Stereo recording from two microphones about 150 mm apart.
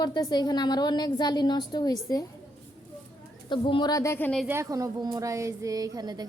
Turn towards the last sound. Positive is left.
turn(degrees=-25)  # may be behind; listen again after turning